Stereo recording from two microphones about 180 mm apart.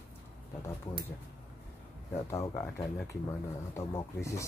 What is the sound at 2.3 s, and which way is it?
Speech, 15° left (ahead or behind).